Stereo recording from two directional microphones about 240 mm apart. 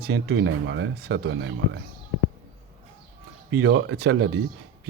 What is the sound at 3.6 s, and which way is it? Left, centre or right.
Speech, right.